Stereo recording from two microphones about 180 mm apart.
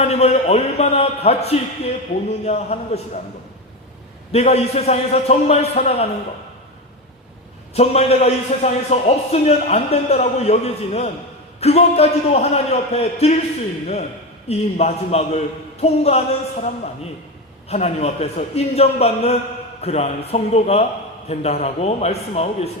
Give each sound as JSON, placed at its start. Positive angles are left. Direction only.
{"t": 0.0, "sound": "a man's voice", "side_deg": 35}
{"t": 4.3, "sound": "a man's voice", "side_deg": 35}
{"t": 7.7, "sound": "a man's voice", "side_deg": 35}
{"t": 14.4, "sound": "a man's voice", "side_deg": 35}